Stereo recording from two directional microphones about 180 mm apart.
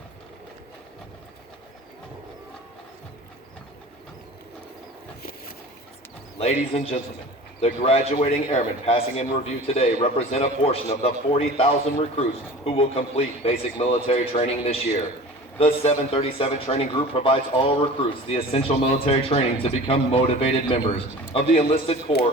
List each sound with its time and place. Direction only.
6.4 s a man's voice: 35° left (ahead or behind)